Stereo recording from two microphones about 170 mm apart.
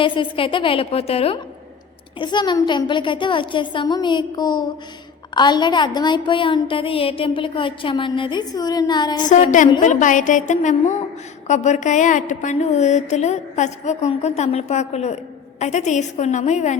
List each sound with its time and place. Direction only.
0.0 s a woman's voice: 30° left (ahead or behind)
9.8 s a woman's voice: 45° left (ahead or behind)